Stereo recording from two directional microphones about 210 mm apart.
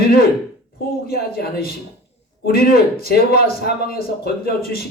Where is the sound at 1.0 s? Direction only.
45° left (ahead or behind).